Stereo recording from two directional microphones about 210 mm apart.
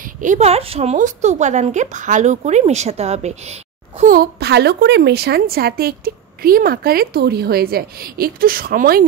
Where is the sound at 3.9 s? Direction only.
45° right (ahead or behind).